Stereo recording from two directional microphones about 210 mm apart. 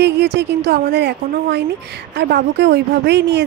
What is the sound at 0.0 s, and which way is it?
A woman's voice, 55° right (ahead or behind).